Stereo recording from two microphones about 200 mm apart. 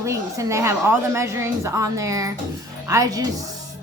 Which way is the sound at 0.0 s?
15° right (ahead or behind).